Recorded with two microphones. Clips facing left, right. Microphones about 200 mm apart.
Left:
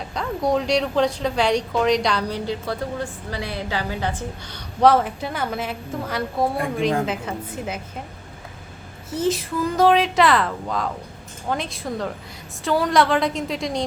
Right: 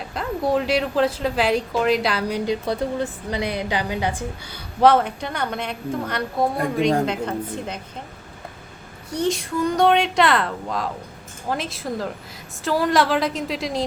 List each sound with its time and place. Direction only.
0.1 s a woman's voice: 5° right (ahead or behind)
2.5 s a woman's voice: 20° right (ahead or behind)
4.8 s a woman's voice: centre (ahead or behind)
9.0 s a woman's voice: centre (ahead or behind)